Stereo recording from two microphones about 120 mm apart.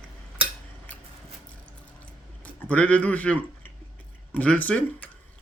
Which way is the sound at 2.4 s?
10° left (ahead or behind).